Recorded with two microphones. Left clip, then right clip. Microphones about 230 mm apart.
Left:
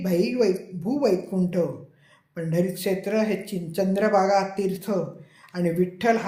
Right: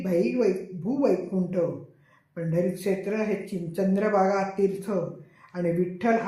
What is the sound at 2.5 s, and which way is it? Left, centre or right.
A man's voice, left.